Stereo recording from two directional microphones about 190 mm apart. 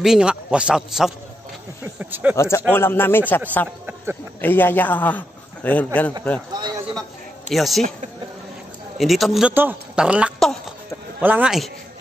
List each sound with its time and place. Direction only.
0.0 s a man's voice: 5° right (ahead or behind)
2.3 s a man's voice: 15° left (ahead or behind)
3.8 s speech: 10° right (ahead or behind)
4.4 s a man's voice: 10° left (ahead or behind)
6.5 s a sound: 20° right (ahead or behind)
7.5 s a man's voice: centre (ahead or behind)
8.9 s speech: centre (ahead or behind)